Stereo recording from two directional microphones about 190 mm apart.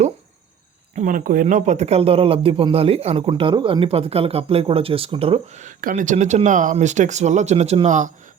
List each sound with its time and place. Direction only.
0.9 s speech: 45° right (ahead or behind)